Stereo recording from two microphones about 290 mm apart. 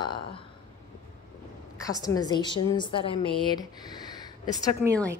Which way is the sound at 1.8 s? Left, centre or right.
Centre.